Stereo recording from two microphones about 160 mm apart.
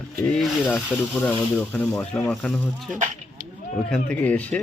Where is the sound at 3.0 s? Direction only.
60° right (ahead or behind).